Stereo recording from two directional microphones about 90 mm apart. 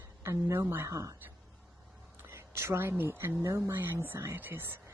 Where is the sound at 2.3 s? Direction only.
30° right (ahead or behind).